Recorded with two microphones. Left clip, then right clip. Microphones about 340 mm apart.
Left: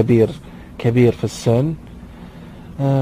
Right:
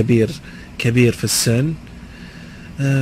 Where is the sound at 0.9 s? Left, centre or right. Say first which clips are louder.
Left 1 dB; centre.